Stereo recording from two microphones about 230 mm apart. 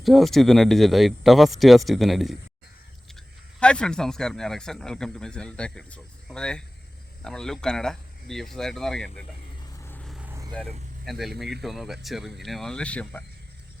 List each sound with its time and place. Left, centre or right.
0.0 s speech: centre
9.8 s vehicle: centre
10.5 s speech: centre